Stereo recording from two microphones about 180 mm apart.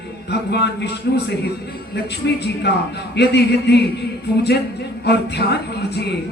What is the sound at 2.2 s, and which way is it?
Speech, 65° left (ahead or behind).